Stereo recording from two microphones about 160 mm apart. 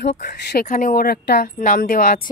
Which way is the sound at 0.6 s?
55° left (ahead or behind).